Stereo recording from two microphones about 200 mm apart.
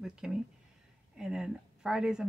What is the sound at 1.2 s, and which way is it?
Speech, 5° right (ahead or behind).